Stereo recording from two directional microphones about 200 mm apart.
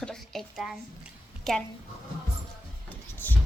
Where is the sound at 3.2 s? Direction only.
10° left (ahead or behind).